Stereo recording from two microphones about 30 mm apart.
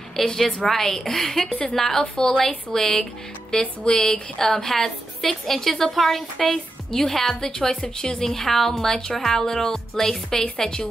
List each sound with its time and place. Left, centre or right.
0.2 s a woman's voice: centre
1.5 s a woman's voice: left
1.8 s a woman's voice: centre
6.4 s speech: centre
7.8 s a woman's voice: left
8.2 s a woman's voice: centre